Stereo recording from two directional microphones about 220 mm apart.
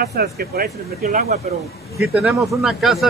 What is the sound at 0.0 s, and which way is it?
Speech, 45° right (ahead or behind).